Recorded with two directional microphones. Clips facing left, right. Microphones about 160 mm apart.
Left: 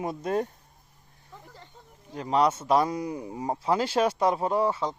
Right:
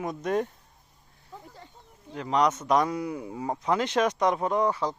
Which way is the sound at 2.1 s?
30° left (ahead or behind).